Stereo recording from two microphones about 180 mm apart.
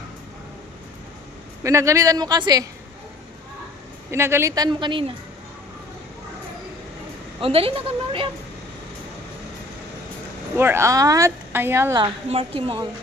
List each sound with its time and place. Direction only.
1.6 s speech: 15° right (ahead or behind)
4.1 s speech: 15° right (ahead or behind)
7.4 s a woman's voice: 30° right (ahead or behind)
10.6 s speech: 15° right (ahead or behind)
12.0 s a woman's voice: 30° right (ahead or behind)